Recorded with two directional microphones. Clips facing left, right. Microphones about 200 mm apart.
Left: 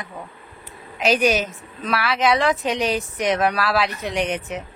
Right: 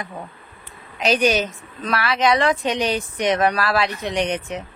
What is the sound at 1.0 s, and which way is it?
A woman's voice, centre (ahead or behind).